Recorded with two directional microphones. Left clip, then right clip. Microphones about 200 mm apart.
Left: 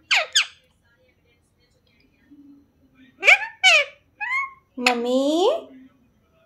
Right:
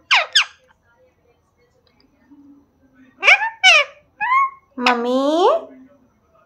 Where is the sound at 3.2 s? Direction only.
25° left (ahead or behind).